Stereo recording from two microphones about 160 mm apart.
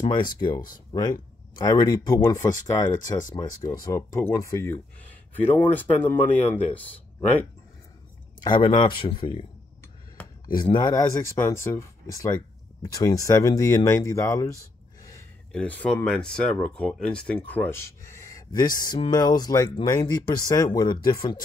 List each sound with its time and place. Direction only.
0.0 s speech: 30° left (ahead or behind); by 6.8 s 10° left (ahead or behind)
8.5 s speech: 30° left (ahead or behind)
11.0 s speech: 15° left (ahead or behind)
15.5 s speech: 10° left (ahead or behind)